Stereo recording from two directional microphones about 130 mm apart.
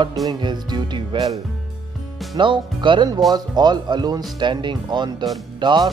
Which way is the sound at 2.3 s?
40° right (ahead or behind).